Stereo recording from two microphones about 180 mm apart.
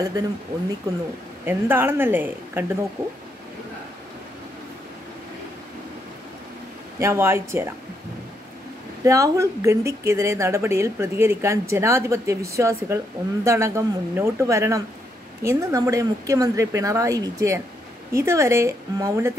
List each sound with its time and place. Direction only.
1.4 s a woman's voice: 10° right (ahead or behind)
7.0 s a woman's voice: 15° right (ahead or behind)
9.0 s a woman's voice: 15° right (ahead or behind)